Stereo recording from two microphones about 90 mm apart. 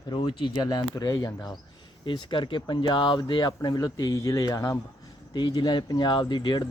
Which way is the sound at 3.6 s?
45° left (ahead or behind).